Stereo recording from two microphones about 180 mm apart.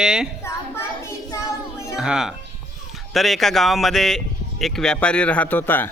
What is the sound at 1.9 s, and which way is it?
Speech, 5° right (ahead or behind).